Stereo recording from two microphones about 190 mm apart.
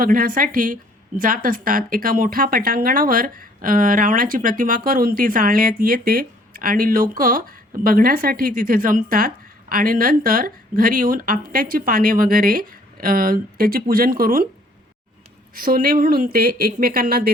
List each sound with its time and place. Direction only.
0.0 s speech: 50° right (ahead or behind)
15.5 s speech: 50° right (ahead or behind)